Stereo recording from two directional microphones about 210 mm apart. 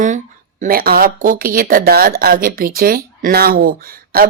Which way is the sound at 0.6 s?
45° right (ahead or behind).